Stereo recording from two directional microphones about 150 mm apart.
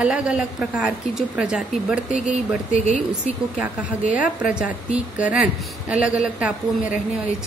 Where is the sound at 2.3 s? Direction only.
50° right (ahead or behind).